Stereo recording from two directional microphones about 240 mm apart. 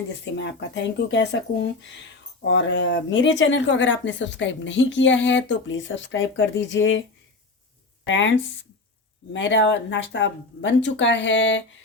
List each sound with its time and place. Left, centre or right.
0.3 s speech: left
8.0 s speech: left
9.3 s speech: left